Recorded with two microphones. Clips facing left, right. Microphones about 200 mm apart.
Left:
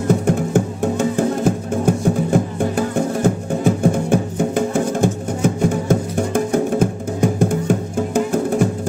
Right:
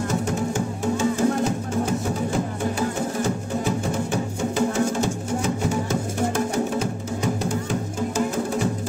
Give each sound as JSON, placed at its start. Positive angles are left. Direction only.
{"t": 0.1, "sound": "music", "side_deg": 55}